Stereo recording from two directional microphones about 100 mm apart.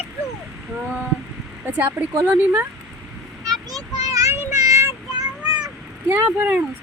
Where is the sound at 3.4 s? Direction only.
40° right (ahead or behind).